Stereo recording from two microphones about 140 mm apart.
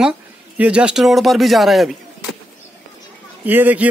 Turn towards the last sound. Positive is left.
turn(degrees=-15)  # may be behind; listen again after turning